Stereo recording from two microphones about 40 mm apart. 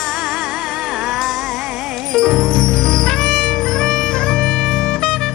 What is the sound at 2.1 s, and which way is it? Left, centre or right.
Music, centre.